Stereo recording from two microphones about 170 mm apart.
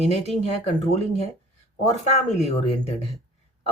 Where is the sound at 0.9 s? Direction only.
40° left (ahead or behind).